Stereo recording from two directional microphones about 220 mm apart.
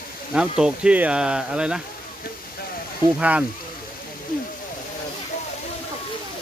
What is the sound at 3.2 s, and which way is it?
Speech, 5° right (ahead or behind).